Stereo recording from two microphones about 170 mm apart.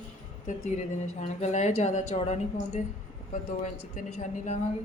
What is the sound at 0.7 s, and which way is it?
A woman's voice, 45° left (ahead or behind).